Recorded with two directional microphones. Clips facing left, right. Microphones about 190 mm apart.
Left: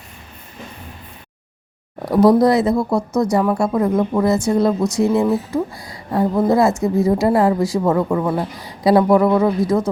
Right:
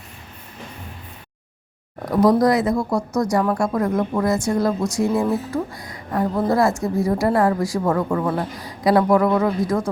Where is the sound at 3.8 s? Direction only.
15° left (ahead or behind).